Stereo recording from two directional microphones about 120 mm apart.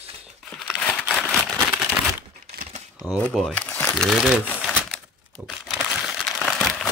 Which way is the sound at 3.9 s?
Centre (ahead or behind).